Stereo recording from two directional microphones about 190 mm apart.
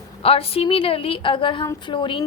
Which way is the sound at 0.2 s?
30° left (ahead or behind).